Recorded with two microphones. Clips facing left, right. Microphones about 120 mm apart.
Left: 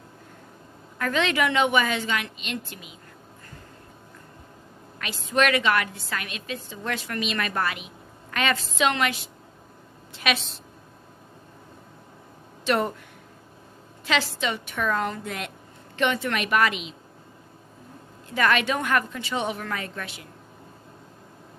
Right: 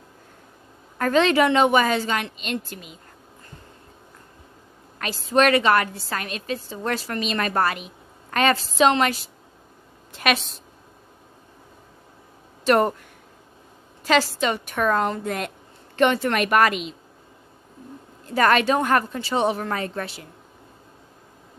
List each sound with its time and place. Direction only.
0.9 s a woman's voice: 40° right (ahead or behind)
4.9 s a woman's voice: 40° right (ahead or behind)
12.6 s speech: 50° right (ahead or behind)
14.0 s a woman's voice: 45° right (ahead or behind)
18.3 s a woman's voice: 40° right (ahead or behind)